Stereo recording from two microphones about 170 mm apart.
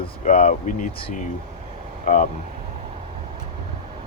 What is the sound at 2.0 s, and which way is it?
Speech, 45° left (ahead or behind).